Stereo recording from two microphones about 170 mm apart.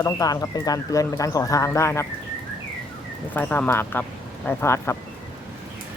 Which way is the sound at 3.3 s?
10° left (ahead or behind).